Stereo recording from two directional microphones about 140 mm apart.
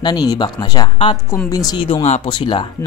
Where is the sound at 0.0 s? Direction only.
30° left (ahead or behind).